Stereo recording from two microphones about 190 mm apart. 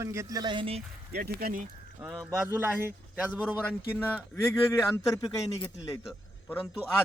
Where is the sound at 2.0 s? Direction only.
10° right (ahead or behind).